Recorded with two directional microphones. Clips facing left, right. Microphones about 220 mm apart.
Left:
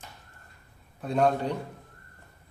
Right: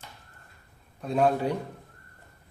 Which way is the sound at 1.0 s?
Centre (ahead or behind).